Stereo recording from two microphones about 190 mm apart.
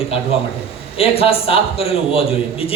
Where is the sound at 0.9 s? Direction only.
30° left (ahead or behind).